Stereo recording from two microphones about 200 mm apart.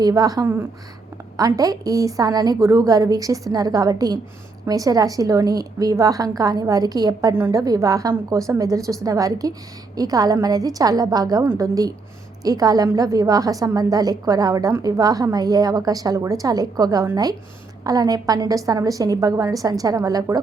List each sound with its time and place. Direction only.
0.0 s a woman's voice: 20° right (ahead or behind)